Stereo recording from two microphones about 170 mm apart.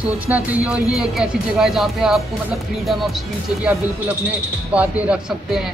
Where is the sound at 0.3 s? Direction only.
10° right (ahead or behind).